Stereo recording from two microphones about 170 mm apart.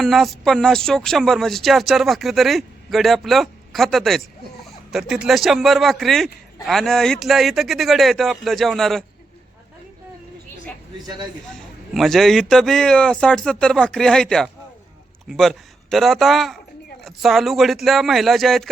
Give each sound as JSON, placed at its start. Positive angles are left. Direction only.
{"t": 0.0, "sound": "a man's voice", "side_deg": 0}
{"t": 10.9, "sound": "a man's voice", "side_deg": -25}
{"t": 11.5, "sound": "a man's voice", "side_deg": 0}